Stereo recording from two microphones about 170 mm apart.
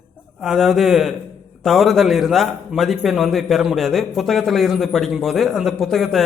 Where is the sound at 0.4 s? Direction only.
Centre (ahead or behind).